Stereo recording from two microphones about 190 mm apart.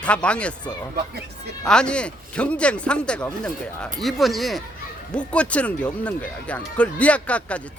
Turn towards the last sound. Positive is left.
turn(degrees=5)  # may be behind; listen again after turning